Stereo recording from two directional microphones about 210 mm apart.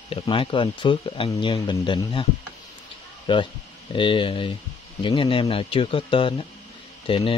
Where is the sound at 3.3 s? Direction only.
20° left (ahead or behind).